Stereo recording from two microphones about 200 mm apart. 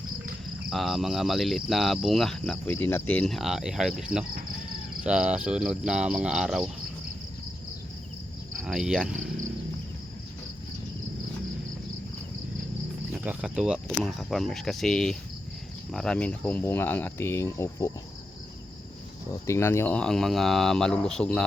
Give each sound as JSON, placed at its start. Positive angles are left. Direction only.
{"t": 0.7, "sound": "speech", "side_deg": 0}
{"t": 8.6, "sound": "speech", "side_deg": -5}
{"t": 13.1, "sound": "speech", "side_deg": -5}
{"t": 19.3, "sound": "speech", "side_deg": 15}